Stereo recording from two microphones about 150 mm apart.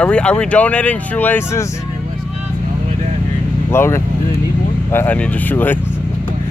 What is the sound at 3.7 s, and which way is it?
Speech, 15° left (ahead or behind).